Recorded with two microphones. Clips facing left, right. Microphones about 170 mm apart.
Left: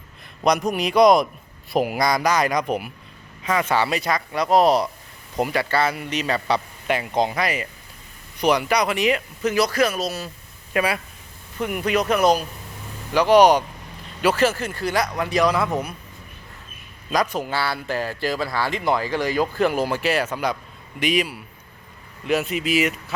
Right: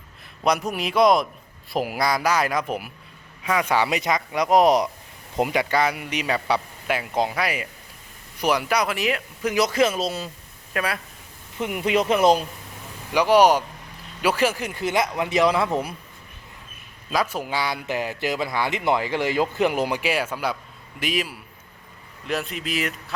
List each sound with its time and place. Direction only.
0.4 s speech: 5° right (ahead or behind)
3.7 s speech: 15° right (ahead or behind)
10.8 s speech: 5° left (ahead or behind)
11.6 s speech: 20° right (ahead or behind)
13.1 s speech: 10° right (ahead or behind); by 15.7 s 25° right (ahead or behind)
17.1 s speech: 5° right (ahead or behind)